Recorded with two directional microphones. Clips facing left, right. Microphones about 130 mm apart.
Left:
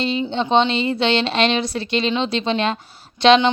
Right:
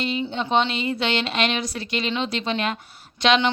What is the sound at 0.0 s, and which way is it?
Speech, 30° left (ahead or behind).